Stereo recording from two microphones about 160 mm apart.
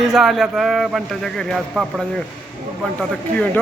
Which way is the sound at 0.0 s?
Centre (ahead or behind).